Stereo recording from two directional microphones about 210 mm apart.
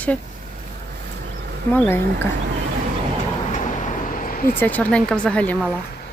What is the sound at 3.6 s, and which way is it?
Vehicle, 35° left (ahead or behind).